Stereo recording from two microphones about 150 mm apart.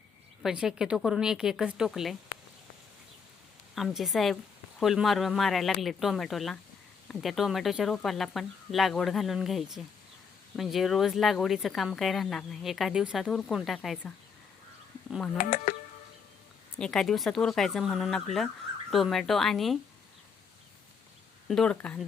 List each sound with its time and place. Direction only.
0.4 s speech: 5° right (ahead or behind)
3.8 s speech: centre (ahead or behind)
15.4 s speech: 65° left (ahead or behind)
16.7 s speech: 5° left (ahead or behind)
21.4 s speech: 5° left (ahead or behind)